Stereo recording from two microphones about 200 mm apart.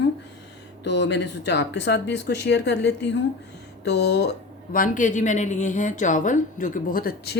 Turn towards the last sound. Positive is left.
turn(degrees=50)  # may be behind; listen again after turning